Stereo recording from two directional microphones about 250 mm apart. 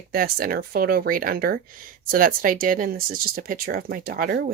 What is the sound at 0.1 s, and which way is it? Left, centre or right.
Speech, right.